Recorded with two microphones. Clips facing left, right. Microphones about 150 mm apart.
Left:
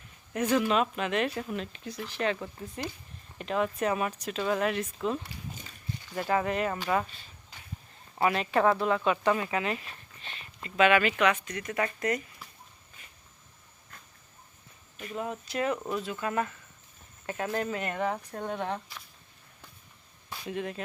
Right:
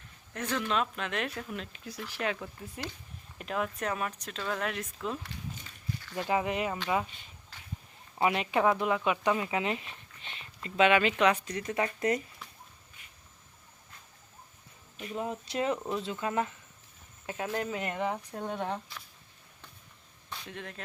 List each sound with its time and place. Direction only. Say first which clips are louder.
0.3 s speech: left 6 dB; 10° left (ahead or behind)
6.0 s a sound: left 2 dB; 15° left (ahead or behind)
6.2 s speech: left 2 dB; 15° right (ahead or behind)
7.5 s walk: left 1 dB; 15° left (ahead or behind)
8.2 s speech: left 2 dB; 15° right (ahead or behind)
12.4 s a sound: even; 5° left (ahead or behind)
15.4 s speech: left 1 dB; 25° right (ahead or behind)
20.3 s speech: left 8 dB; 10° left (ahead or behind)